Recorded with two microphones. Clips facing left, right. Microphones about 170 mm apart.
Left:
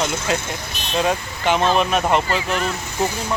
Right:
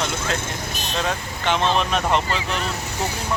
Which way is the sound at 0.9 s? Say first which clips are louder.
Left 6 dB; 10° left (ahead or behind).